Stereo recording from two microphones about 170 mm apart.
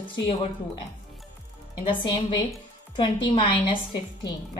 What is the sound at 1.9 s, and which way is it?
A woman's voice, 30° left (ahead or behind).